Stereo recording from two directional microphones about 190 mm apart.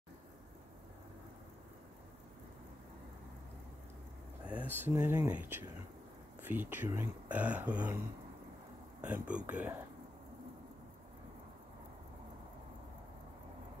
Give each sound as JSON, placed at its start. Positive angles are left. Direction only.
{"t": 4.5, "sound": "speech", "side_deg": -10}
{"t": 9.0, "sound": "speech", "side_deg": -5}